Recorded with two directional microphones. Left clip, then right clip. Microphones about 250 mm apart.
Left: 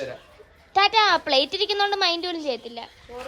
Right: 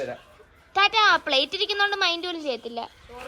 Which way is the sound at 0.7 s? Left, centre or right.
Centre.